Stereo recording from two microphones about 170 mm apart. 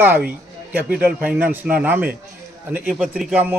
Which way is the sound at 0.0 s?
10° right (ahead or behind).